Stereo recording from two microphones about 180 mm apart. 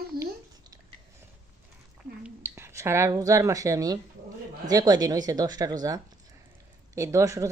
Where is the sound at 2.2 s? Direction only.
10° right (ahead or behind).